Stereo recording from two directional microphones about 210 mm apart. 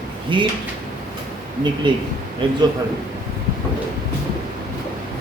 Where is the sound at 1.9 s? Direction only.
20° right (ahead or behind).